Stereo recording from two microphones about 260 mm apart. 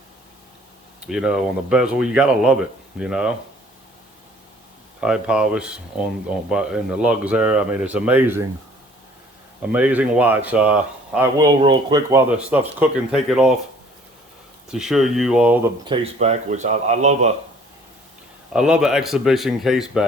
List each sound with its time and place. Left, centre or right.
1.0 s speech: centre
4.9 s speech: centre
9.7 s speech: centre
11.3 s speech: centre
12.4 s speech: centre
14.7 s speech: centre
15.9 s speech: right
18.5 s speech: centre